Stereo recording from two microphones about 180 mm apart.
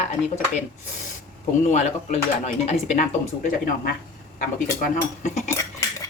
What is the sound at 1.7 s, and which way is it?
Speech, 40° left (ahead or behind).